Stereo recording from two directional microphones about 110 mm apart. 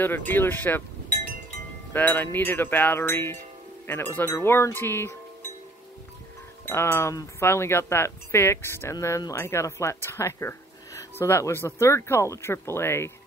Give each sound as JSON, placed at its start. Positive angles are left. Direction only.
{"t": 0.0, "sound": "speech", "side_deg": 15}
{"t": 2.0, "sound": "speech", "side_deg": 15}
{"t": 6.7, "sound": "speech", "side_deg": 25}